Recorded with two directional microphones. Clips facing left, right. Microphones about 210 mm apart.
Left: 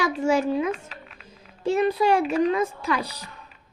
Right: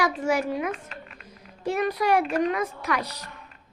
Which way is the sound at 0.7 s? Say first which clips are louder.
Left 3 dB; centre (ahead or behind).